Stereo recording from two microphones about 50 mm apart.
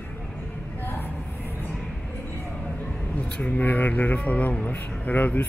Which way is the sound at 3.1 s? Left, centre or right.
Left.